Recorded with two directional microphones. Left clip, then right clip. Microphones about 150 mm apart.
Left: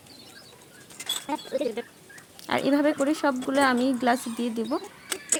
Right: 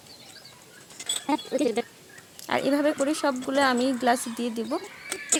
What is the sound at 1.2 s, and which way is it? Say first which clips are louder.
Speech: right 5 dB; 80° right.